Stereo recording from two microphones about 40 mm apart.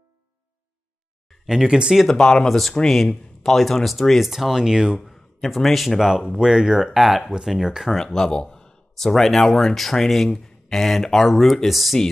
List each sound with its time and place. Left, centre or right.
1.5 s speech: centre
2.0 s speech: centre
2.4 s speech: centre
5.0 s a man's voice: centre
5.9 s speech: centre
8.0 s speech: centre
8.9 s speech: centre